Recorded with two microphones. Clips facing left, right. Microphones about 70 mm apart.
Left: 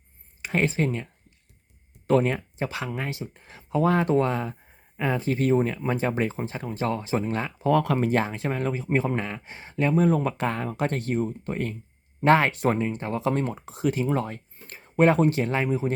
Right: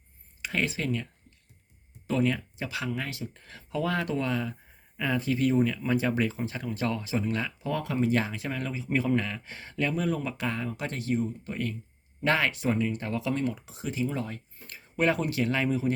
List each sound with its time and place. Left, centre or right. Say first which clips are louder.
0.4 s speech: left 5 dB; left
2.2 s speech: left 2 dB; left
7.7 s speech: left 6 dB; left
8.9 s speech: right 1 dB; left
12.8 s speech: left 3 dB; left